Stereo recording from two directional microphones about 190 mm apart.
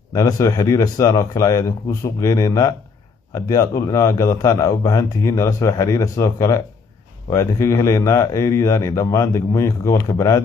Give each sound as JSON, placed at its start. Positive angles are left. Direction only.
{"t": 0.1, "sound": "a man's voice", "side_deg": 15}